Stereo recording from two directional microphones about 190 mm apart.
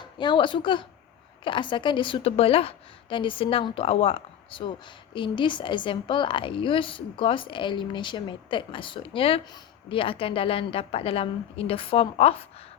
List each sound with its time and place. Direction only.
0.0 s a woman's voice: 25° left (ahead or behind)